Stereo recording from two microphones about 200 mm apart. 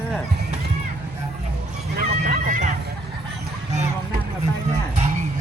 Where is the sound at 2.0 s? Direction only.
45° right (ahead or behind).